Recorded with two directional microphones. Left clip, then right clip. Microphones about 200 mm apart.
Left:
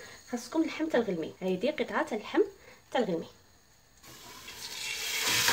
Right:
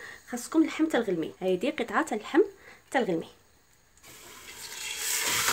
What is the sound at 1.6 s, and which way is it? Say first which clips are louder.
Stir: right 2 dB; 40° right (ahead or behind).